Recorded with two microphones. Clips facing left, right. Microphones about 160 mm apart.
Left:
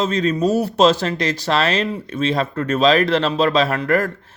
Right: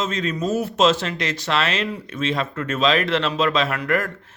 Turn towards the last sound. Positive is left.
turn(degrees=35)  # may be behind; listen again after turning